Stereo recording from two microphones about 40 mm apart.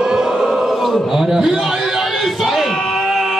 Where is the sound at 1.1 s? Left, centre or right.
Centre.